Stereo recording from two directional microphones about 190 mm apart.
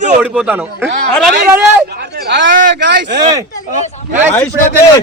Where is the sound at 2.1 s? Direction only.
60° right (ahead or behind).